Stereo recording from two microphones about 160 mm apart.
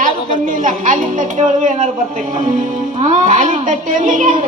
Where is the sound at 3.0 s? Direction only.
50° right (ahead or behind).